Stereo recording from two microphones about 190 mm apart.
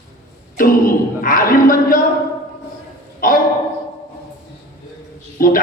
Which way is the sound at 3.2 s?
45° left (ahead or behind).